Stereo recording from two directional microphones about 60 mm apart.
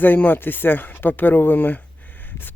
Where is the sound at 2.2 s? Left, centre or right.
Left.